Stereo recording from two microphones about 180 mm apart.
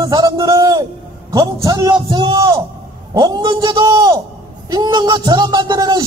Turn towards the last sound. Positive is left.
turn(degrees=-20)  # may be behind; listen again after turning